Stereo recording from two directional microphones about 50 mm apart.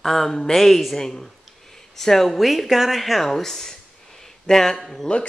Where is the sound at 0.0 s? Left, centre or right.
Centre.